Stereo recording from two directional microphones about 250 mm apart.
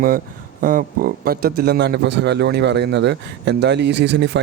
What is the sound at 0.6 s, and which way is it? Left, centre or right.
A man's voice, right.